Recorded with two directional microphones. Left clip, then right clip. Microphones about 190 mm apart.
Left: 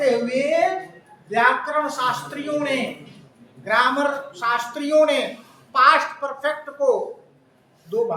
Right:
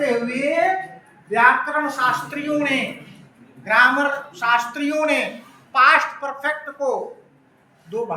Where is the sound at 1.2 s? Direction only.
10° left (ahead or behind).